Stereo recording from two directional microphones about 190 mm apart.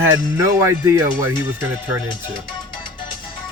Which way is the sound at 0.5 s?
15° right (ahead or behind).